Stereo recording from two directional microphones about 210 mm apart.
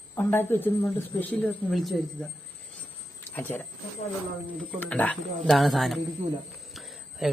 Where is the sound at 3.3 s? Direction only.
10° left (ahead or behind).